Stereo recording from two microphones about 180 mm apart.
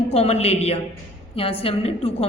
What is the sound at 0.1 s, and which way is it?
A man's voice, 35° left (ahead or behind).